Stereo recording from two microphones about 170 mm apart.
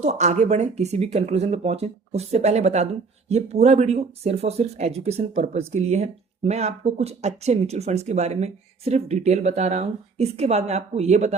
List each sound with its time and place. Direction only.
0.0 s speech: 45° right (ahead or behind)